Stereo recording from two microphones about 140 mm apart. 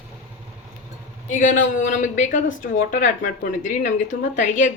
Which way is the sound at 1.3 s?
70° left (ahead or behind).